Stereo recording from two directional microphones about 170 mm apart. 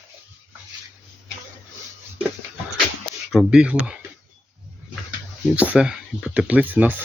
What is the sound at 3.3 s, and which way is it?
Speech, 5° right (ahead or behind).